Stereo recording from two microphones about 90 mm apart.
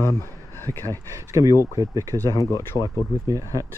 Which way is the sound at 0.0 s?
30° left (ahead or behind).